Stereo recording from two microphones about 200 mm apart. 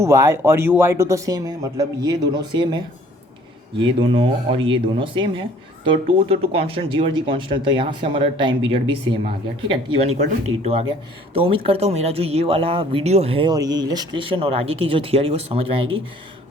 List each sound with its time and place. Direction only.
0.0 s speech: 15° right (ahead or behind)
4.1 s speech: 25° right (ahead or behind)